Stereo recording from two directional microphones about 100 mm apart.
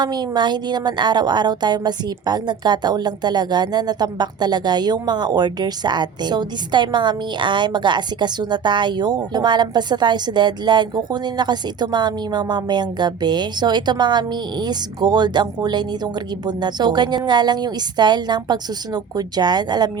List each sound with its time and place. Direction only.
0.0 s speech: 45° right (ahead or behind)